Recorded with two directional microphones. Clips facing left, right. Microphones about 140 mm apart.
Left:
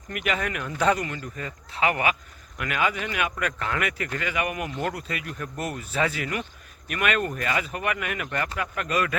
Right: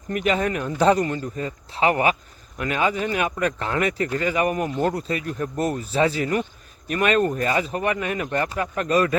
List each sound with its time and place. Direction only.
0.1 s speech: 30° right (ahead or behind)